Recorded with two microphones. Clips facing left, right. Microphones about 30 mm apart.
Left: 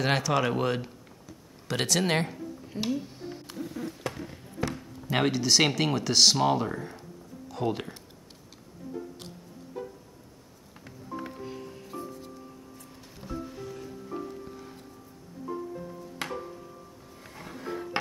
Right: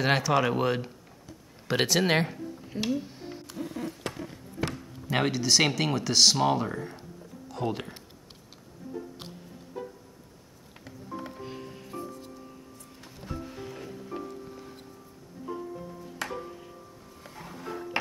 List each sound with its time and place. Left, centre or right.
0.0 s speech: centre
3.7 s a sound: right
4.7 s speech: centre
13.2 s music: centre
13.7 s music: right